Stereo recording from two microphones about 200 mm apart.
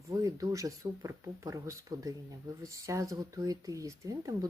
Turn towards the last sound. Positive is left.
turn(degrees=-15)  # may be behind; listen again after turning